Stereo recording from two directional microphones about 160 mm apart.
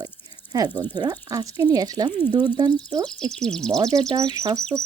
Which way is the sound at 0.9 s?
25° right (ahead or behind).